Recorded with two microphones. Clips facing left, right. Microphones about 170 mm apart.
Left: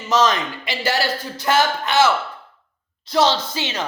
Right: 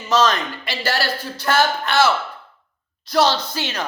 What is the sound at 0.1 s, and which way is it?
Speech, 20° left (ahead or behind).